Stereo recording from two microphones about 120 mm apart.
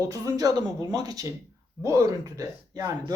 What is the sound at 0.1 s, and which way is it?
Speech, 30° right (ahead or behind).